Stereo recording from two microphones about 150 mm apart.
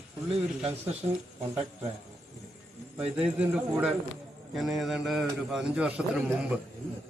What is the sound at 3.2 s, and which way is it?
A man's voice, 5° right (ahead or behind).